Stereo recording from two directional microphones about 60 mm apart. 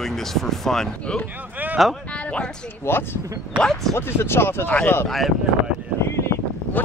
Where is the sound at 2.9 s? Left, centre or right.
Left.